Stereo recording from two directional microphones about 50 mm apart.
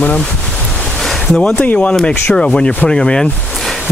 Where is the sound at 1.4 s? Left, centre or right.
Left.